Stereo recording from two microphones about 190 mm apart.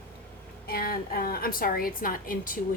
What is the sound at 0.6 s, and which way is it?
A woman's voice, 50° left (ahead or behind).